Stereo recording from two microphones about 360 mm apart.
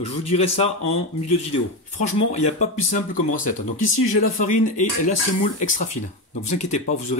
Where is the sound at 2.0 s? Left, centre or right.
Centre.